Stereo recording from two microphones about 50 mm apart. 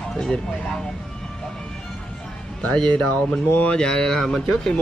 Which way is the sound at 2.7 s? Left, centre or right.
Centre.